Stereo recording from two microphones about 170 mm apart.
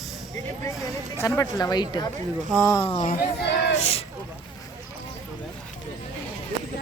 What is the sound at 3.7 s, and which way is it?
Speech, 40° left (ahead or behind).